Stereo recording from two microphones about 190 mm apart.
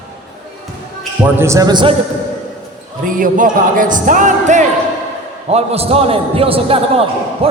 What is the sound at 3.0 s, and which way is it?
A man's voice, 45° right (ahead or behind).